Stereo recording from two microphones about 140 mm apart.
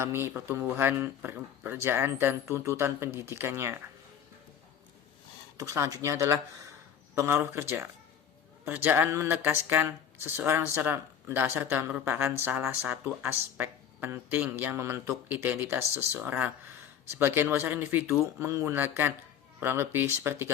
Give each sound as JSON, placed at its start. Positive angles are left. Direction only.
{"t": 0.0, "sound": "speech", "side_deg": -20}
{"t": 5.5, "sound": "speech", "side_deg": -20}